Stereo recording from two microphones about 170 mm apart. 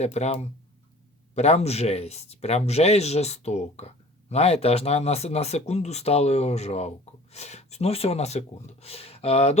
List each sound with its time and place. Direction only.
0.0 s speech: 40° left (ahead or behind)
1.4 s speech: 40° left (ahead or behind)